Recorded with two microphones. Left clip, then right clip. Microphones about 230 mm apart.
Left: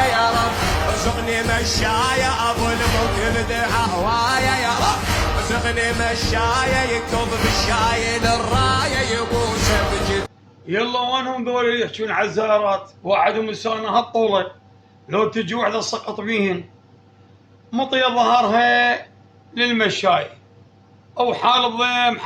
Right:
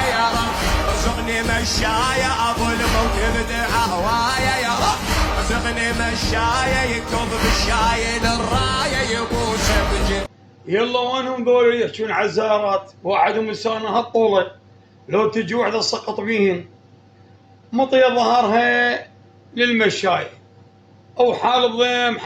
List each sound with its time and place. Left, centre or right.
0.0 s music: centre
10.7 s a man's voice: centre
17.7 s a man's voice: centre